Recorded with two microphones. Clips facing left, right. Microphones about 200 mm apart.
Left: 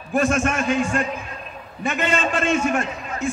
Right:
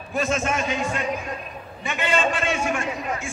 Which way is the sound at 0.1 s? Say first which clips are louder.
Left 4 dB; 50° left (ahead or behind).